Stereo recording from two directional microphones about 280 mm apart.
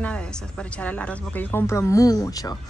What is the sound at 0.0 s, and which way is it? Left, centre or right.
Speech, centre.